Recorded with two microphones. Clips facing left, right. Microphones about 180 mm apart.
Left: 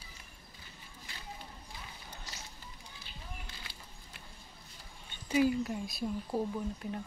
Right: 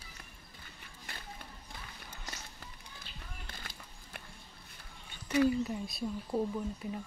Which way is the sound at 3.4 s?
55° right (ahead or behind).